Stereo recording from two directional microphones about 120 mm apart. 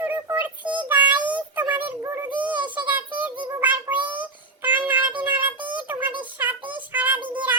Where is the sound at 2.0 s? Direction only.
20° right (ahead or behind).